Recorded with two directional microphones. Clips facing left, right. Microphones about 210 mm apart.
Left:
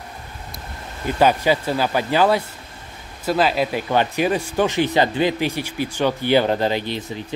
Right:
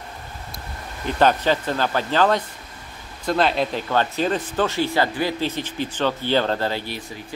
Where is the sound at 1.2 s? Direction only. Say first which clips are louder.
Left 1 dB; 10° left (ahead or behind).